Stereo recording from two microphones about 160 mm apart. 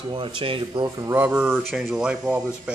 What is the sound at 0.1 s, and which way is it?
Speech, 30° right (ahead or behind).